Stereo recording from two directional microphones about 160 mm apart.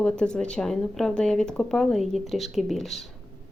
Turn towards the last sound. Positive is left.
turn(degrees=0)  # may be behind; listen again after turning